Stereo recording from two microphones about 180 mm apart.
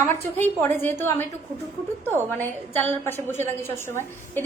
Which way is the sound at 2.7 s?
10° left (ahead or behind).